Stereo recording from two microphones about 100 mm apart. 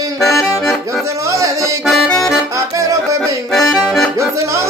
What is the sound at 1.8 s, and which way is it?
Accordion, centre (ahead or behind).